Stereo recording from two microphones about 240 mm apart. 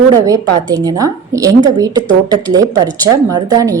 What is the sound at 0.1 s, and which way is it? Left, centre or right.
Speech, centre.